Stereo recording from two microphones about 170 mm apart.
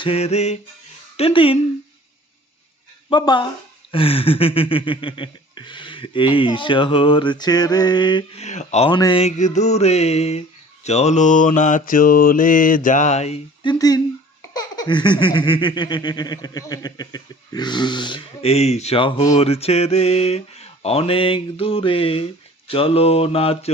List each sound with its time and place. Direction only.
0.0 s speech: 35° left (ahead or behind)
3.1 s baby laughter: 25° left (ahead or behind)
8.4 s speech: 40° left (ahead or behind)
8.9 s baby laughter: 25° left (ahead or behind)
9.2 s speech: 45° left (ahead or behind)
10.8 s mantra: 40° left (ahead or behind); by 14.0 s 20° left (ahead or behind)
14.5 s baby laughter: 25° left (ahead or behind)
19.3 s speech: 35° left (ahead or behind)